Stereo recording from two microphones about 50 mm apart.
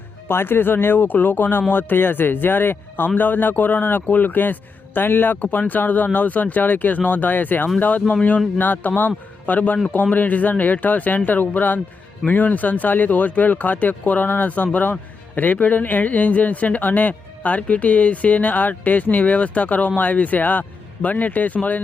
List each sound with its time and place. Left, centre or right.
0.3 s a man's voice: left